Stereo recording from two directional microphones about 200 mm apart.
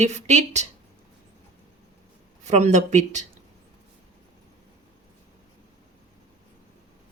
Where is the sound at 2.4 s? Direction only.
35° right (ahead or behind).